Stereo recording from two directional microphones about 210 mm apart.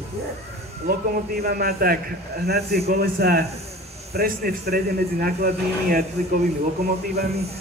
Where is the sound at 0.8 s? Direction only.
45° right (ahead or behind).